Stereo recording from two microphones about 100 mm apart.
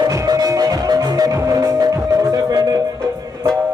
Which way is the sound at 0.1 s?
40° right (ahead or behind).